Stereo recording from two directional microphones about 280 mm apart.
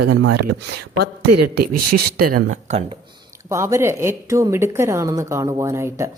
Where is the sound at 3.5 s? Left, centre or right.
Centre.